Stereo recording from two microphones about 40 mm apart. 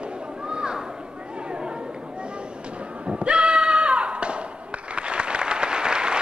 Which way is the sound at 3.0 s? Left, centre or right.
Right.